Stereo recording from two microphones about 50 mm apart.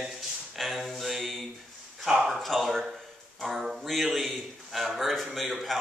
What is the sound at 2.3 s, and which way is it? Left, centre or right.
Speech, centre.